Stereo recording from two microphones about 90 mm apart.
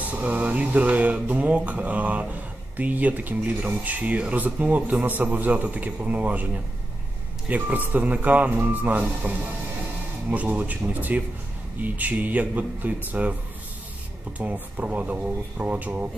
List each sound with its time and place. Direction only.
0.1 s speech: 15° right (ahead or behind)
10.3 s speech: 15° right (ahead or behind)
14.4 s speech: 15° right (ahead or behind)